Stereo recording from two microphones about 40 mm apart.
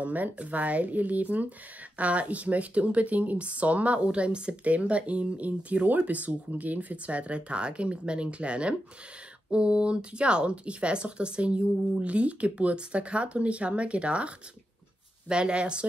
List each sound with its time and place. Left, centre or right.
0.0 s speech: right